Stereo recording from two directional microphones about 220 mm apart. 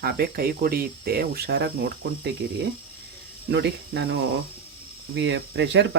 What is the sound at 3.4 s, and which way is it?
Speech, 50° right (ahead or behind).